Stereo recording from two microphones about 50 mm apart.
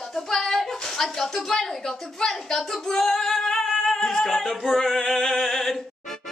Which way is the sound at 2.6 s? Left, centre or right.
Centre.